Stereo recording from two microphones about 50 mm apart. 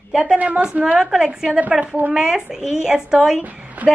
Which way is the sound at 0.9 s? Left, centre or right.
Centre.